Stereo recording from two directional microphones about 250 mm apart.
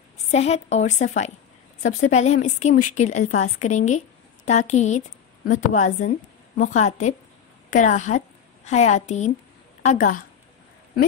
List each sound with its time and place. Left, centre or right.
0.3 s a woman's voice: left